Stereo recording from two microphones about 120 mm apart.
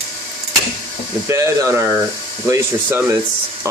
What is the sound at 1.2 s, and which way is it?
Speech, 25° right (ahead or behind).